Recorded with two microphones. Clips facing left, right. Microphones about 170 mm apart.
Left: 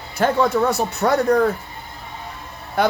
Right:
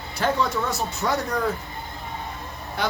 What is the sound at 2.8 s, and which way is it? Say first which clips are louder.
Speech: left 8 dB; 55° left (ahead or behind).